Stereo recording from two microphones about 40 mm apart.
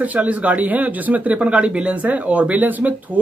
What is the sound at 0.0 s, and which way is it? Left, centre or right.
A man's voice, right.